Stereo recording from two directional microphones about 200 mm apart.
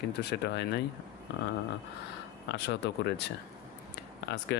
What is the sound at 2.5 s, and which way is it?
Speech, 60° left (ahead or behind).